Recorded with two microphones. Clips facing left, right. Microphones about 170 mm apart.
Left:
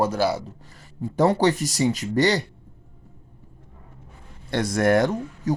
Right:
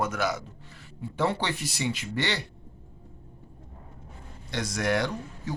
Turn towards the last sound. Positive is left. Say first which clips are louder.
# left 8 dB
turn(degrees=45)  # may be behind; listen again after turning